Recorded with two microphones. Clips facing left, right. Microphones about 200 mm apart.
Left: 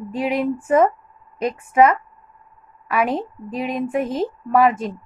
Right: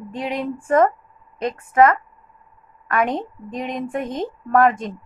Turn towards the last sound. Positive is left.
turn(degrees=5)  # may be behind; listen again after turning